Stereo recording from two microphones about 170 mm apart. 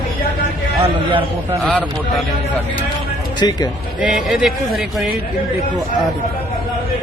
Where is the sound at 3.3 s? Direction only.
25° left (ahead or behind).